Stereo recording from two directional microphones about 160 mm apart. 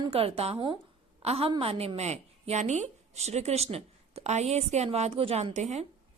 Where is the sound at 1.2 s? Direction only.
40° right (ahead or behind).